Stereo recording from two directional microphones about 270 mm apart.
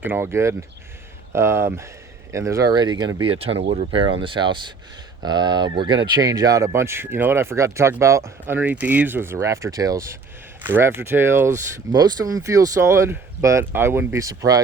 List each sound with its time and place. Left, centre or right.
0.0 s speech: centre